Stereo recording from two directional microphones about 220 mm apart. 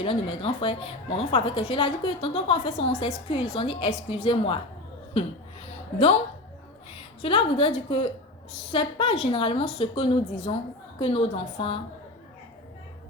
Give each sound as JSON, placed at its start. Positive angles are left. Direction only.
{"t": 0.0, "sound": "a woman's voice", "side_deg": 25}
{"t": 7.2, "sound": "a woman's voice", "side_deg": 25}